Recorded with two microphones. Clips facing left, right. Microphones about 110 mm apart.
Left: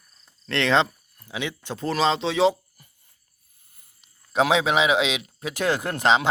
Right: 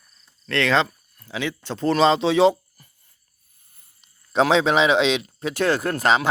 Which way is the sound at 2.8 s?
15° left (ahead or behind).